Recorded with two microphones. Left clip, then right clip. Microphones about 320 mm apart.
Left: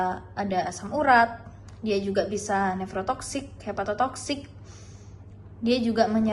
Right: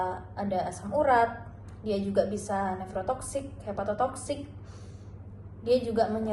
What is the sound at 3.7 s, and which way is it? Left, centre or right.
Speech, left.